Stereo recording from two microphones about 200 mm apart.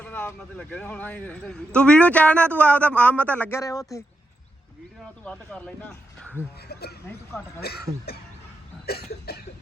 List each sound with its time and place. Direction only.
0.0 s a man's voice: 10° left (ahead or behind)
5.2 s a man's voice: 5° left (ahead or behind)
6.6 s speech: 50° left (ahead or behind)